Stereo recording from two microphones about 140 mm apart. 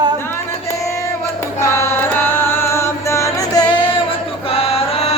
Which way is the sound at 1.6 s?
20° left (ahead or behind).